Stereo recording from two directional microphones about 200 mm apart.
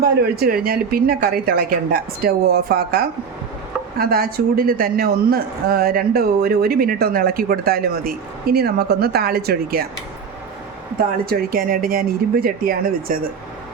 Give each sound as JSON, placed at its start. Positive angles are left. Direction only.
{"t": 0.3, "sound": "a man's voice", "side_deg": -45}
{"t": 10.9, "sound": "a man's voice", "side_deg": -45}